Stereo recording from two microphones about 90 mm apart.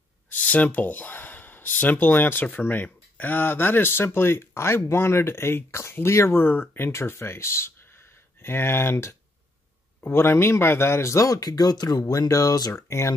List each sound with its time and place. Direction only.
0.3 s speech: 15° left (ahead or behind); by 12.8 s 45° left (ahead or behind)
12.8 s speech: 30° left (ahead or behind)